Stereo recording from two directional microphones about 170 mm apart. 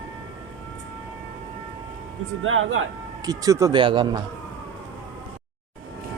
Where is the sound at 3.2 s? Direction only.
20° right (ahead or behind).